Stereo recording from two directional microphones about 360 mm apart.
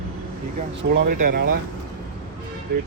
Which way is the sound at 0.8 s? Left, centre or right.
Right.